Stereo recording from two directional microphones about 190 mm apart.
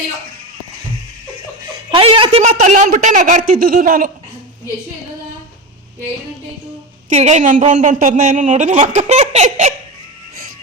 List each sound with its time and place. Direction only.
1.9 s a man's voice: 30° right (ahead or behind); by 4.1 s 45° right (ahead or behind)
7.1 s a woman's voice: 35° right (ahead or behind)